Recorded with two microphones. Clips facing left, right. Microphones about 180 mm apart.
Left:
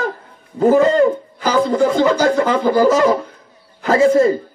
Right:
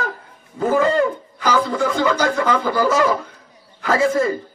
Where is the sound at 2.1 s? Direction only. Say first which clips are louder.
Left 4 dB; 30° left (ahead or behind).